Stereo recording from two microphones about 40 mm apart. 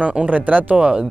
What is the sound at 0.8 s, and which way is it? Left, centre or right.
Speech, right.